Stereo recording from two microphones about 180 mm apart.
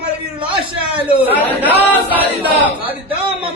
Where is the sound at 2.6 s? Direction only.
10° right (ahead or behind).